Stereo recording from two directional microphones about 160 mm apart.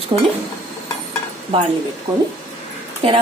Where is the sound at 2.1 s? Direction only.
25° right (ahead or behind).